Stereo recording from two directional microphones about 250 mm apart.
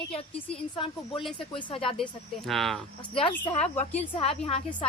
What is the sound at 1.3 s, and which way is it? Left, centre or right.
Speech, left.